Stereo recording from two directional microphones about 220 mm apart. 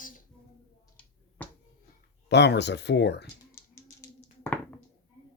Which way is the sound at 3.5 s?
10° left (ahead or behind).